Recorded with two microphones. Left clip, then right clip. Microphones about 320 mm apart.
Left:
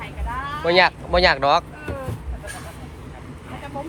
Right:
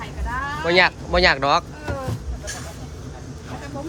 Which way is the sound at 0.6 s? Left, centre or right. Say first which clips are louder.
Left 1 dB; centre.